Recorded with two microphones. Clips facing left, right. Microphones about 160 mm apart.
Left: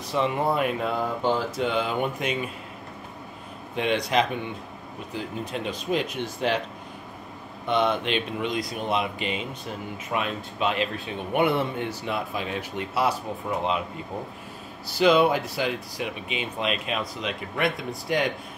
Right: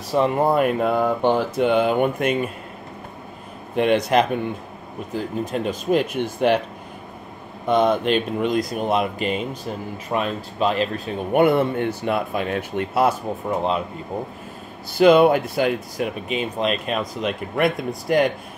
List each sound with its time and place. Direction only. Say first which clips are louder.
0.1 s speech: right 6 dB; 45° right (ahead or behind)
3.7 s speech: right 6 dB; 55° right (ahead or behind)
7.6 s speech: right 6 dB; 45° right (ahead or behind)
13.6 s speech: right 4 dB; 40° right (ahead or behind)
15.0 s speech: right 6 dB; 55° right (ahead or behind)
17.3 s speech: right 6 dB; centre (ahead or behind)
17.7 s speech: right 7 dB; 50° right (ahead or behind)